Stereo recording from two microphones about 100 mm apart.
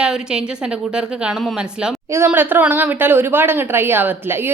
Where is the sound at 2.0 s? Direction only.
25° right (ahead or behind).